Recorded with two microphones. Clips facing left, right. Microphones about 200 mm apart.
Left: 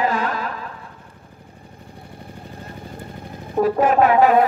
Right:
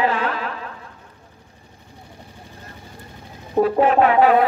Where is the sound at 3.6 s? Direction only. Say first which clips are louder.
Even; 45° left (ahead or behind).